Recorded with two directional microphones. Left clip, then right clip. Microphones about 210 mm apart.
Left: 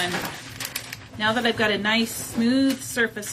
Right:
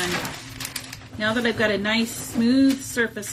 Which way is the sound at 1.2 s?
30° left (ahead or behind).